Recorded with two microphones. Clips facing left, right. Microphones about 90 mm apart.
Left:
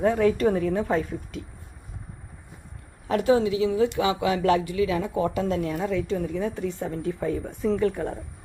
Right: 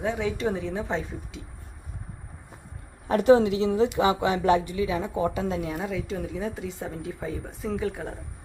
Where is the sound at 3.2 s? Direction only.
50° right (ahead or behind).